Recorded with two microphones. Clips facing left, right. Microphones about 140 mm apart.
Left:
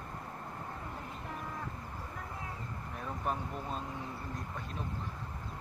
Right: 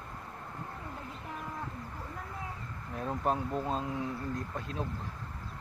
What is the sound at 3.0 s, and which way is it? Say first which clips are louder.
Speech: right 6 dB; 25° right (ahead or behind).